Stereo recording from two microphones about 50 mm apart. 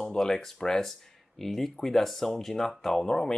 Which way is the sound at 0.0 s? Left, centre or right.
Centre.